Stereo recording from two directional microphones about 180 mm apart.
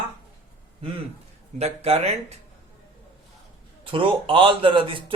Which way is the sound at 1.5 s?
35° right (ahead or behind).